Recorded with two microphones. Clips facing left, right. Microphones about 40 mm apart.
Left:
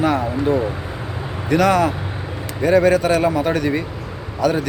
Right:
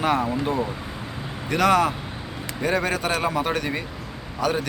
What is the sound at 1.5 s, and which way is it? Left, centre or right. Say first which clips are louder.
Speech: left 4 dB; right.